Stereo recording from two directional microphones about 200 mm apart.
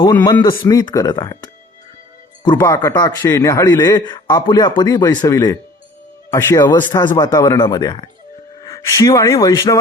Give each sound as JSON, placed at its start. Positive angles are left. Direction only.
{"t": 0.0, "sound": "speech", "side_deg": 20}